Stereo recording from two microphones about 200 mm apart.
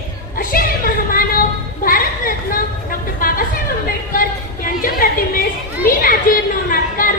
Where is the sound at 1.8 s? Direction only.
45° left (ahead or behind).